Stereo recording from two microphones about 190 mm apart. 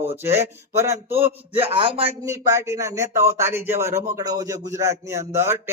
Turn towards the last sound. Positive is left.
turn(degrees=-15)  # may be behind; listen again after turning